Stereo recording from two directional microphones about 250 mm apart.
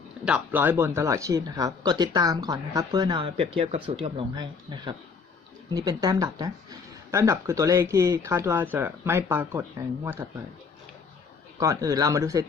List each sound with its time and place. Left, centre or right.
0.3 s speech: centre; by 4.4 s right
5.7 s speech: centre
11.6 s speech: centre